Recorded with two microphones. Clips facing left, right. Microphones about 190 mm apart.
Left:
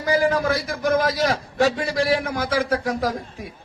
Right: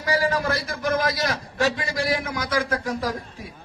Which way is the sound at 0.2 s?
55° left (ahead or behind).